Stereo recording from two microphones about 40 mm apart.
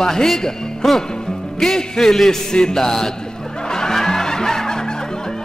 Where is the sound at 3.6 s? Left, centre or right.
Centre.